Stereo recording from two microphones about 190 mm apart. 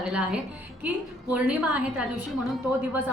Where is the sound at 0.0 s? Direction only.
5° right (ahead or behind).